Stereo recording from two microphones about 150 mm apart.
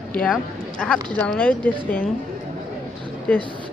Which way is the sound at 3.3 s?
10° left (ahead or behind).